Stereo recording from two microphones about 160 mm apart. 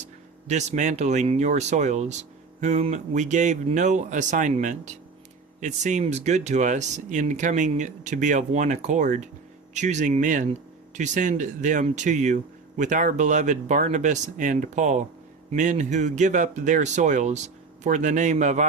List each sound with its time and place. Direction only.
0.4 s speech: 50° right (ahead or behind)